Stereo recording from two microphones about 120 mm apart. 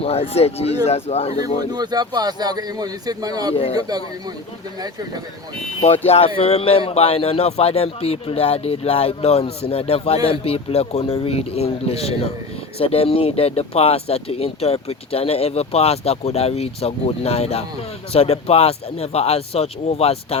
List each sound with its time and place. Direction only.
0.0 s speech: 55° left (ahead or behind)
1.7 s a man's voice: 35° right (ahead or behind)
6.1 s speech: 55° left (ahead or behind)